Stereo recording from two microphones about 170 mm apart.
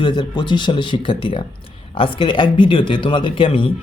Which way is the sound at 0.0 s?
25° left (ahead or behind).